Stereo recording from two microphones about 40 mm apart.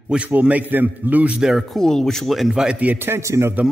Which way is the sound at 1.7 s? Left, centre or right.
Centre.